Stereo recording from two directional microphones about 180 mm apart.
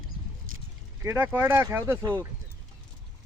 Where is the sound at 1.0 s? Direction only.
10° right (ahead or behind).